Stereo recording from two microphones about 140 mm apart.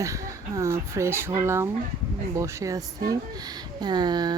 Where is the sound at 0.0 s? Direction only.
20° right (ahead or behind).